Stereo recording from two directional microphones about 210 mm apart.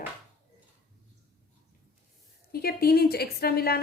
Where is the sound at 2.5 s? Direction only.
45° left (ahead or behind).